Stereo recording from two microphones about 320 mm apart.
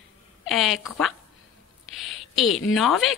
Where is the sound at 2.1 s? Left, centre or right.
Centre.